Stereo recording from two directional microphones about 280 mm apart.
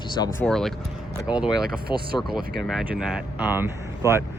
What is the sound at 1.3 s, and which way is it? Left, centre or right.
Speech, centre.